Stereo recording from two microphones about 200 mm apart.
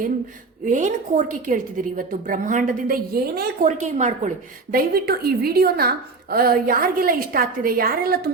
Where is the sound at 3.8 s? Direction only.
35° right (ahead or behind).